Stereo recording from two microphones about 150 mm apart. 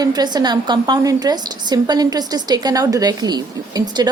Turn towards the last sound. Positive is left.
turn(degrees=-25)  # may be behind; listen again after turning